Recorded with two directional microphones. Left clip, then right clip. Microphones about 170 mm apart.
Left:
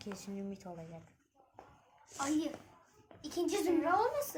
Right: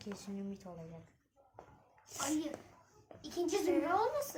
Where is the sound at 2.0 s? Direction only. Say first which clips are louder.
Left 2 dB; 45° right (ahead or behind).